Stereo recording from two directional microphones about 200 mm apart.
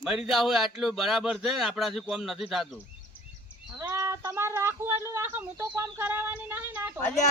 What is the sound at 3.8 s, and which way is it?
Speech, 15° right (ahead or behind).